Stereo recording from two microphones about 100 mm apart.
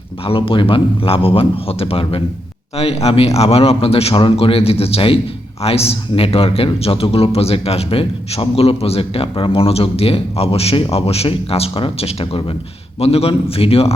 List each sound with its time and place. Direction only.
0.3 s a man's voice: 65° left (ahead or behind)
2.7 s a man's voice: 90° left; by 5.2 s 65° left (ahead or behind)
5.6 s a man's voice: 85° left
13.0 s a man's voice: 90° left